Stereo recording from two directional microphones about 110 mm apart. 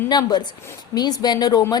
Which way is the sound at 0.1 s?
40° left (ahead or behind).